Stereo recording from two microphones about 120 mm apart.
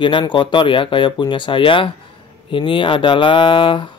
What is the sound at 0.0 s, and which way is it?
Speech, 40° left (ahead or behind).